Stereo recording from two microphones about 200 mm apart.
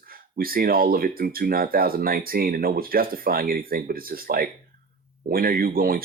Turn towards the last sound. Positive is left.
turn(degrees=-45)  # may be behind; listen again after turning